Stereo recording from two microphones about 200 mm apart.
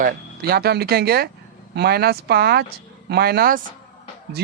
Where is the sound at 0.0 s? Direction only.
50° right (ahead or behind).